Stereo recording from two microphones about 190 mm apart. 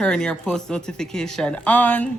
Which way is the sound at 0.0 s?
5° left (ahead or behind).